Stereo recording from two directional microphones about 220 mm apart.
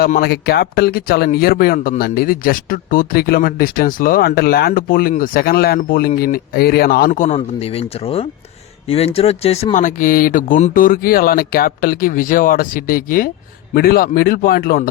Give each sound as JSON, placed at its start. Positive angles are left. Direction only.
{"t": 0.2, "sound": "speech", "side_deg": 45}
{"t": 7.3, "sound": "speech", "side_deg": 25}